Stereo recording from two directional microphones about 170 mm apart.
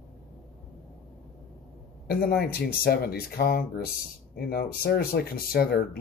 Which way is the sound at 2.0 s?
65° left (ahead or behind).